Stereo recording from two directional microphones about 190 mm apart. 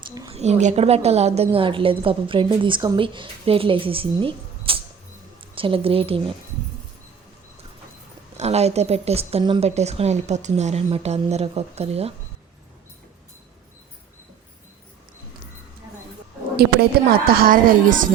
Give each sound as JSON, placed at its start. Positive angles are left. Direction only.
{"t": 0.0, "sound": "a sound", "side_deg": -20}
{"t": 0.3, "sound": "a woman's voice", "side_deg": -35}
{"t": 8.4, "sound": "a woman's voice", "side_deg": -35}
{"t": 17.1, "sound": "a woman's voice", "side_deg": -50}